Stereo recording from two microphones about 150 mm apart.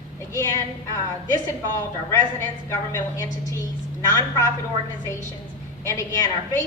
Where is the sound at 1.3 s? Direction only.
20° left (ahead or behind).